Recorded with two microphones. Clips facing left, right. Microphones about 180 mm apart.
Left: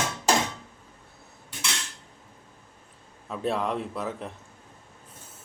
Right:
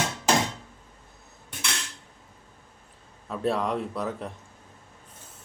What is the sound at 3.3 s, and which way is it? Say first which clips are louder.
Speech: right 1 dB; centre (ahead or behind).